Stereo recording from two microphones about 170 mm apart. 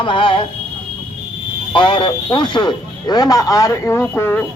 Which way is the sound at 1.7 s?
30° left (ahead or behind).